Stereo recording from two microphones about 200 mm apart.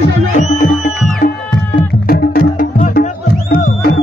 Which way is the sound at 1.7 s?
45° left (ahead or behind).